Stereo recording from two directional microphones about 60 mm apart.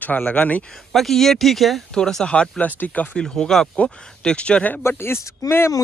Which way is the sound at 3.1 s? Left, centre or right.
Centre.